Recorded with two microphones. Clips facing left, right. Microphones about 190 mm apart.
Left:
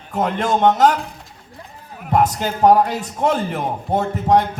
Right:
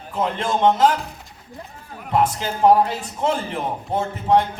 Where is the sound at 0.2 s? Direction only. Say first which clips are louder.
Left 3 dB; 45° left (ahead or behind).